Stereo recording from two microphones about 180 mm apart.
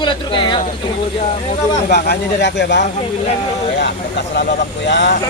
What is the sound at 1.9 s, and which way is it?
Speech, 65° left (ahead or behind).